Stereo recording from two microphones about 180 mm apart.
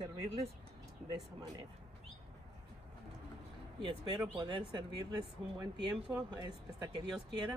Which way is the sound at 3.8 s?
25° right (ahead or behind).